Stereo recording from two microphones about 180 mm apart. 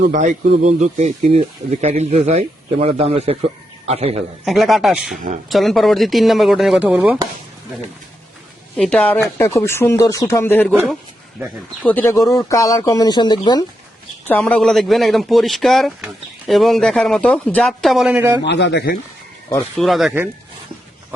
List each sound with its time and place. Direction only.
0.0 s speech: 40° right (ahead or behind)
4.4 s speech: centre (ahead or behind)
8.7 s speech: 5° left (ahead or behind)
11.8 s speech: 10° left (ahead or behind); by 13.7 s 25° left (ahead or behind)
14.3 s speech: 5° left (ahead or behind); by 18.3 s 10° right (ahead or behind)
18.4 s speech: 70° left (ahead or behind)
19.7 s speech: centre (ahead or behind)